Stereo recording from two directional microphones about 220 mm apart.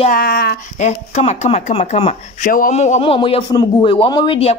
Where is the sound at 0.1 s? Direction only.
45° left (ahead or behind).